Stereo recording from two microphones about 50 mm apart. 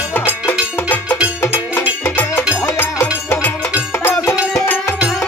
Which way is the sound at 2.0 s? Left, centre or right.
Left.